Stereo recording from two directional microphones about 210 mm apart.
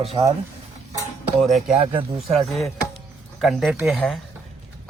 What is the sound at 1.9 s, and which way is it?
Speech, 25° right (ahead or behind).